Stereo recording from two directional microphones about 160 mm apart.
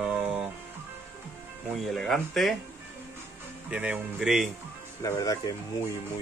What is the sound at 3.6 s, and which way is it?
Speech, 5° right (ahead or behind).